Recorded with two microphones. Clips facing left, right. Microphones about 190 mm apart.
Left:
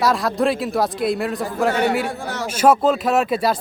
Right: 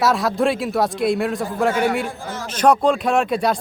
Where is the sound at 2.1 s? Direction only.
70° left (ahead or behind).